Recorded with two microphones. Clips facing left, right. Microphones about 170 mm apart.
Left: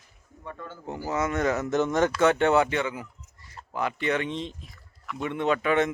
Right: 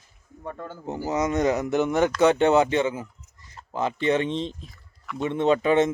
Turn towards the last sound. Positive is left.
turn(degrees=-25)  # may be behind; listen again after turning